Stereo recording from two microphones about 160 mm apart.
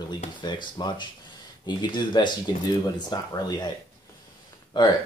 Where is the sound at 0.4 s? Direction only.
25° left (ahead or behind).